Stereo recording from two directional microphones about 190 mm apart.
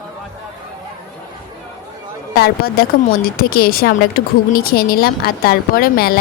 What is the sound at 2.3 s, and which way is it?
Speech, 55° left (ahead or behind).